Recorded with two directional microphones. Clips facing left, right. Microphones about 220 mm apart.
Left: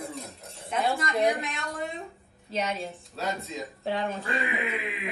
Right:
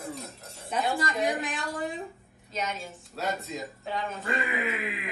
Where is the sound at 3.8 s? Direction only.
30° left (ahead or behind).